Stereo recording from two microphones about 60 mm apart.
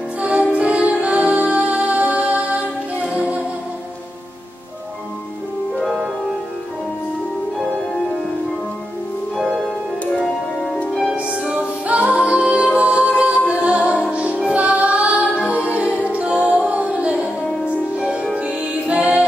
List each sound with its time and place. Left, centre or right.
0.2 s music: right
5.8 s music: centre
10.1 s organ: centre
11.1 s music: centre